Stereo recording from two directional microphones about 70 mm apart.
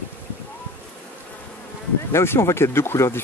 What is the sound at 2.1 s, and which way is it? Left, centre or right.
Speech, left.